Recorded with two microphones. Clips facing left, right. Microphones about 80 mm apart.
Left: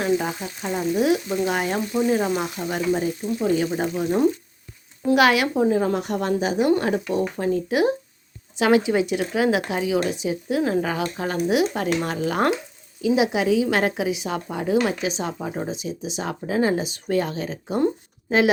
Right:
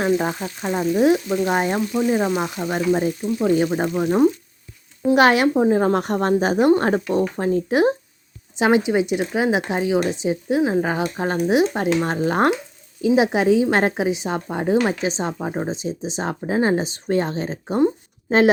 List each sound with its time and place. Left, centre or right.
0.0 s speech: right
0.6 s speech: right
2.0 s speech: centre
2.4 s speech: right
5.1 s speech: right
8.5 s speech: right